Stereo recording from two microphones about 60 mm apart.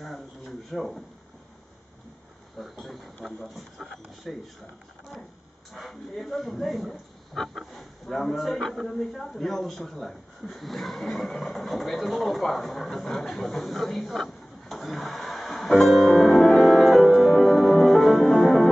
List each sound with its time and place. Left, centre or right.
0.7 s speech: centre
2.6 s speech: centre
5.7 s speech: centre